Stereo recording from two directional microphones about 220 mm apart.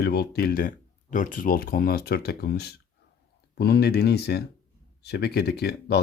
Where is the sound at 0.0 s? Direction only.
45° left (ahead or behind).